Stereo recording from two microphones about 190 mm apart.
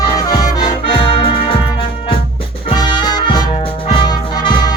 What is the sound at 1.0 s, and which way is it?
Music, 25° left (ahead or behind).